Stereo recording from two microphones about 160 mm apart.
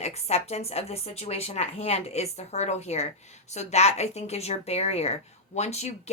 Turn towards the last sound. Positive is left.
turn(degrees=45)  # may be behind; listen again after turning